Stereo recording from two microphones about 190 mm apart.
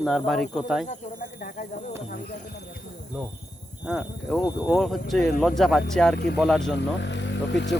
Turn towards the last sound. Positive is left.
turn(degrees=65)  # may be behind; listen again after turning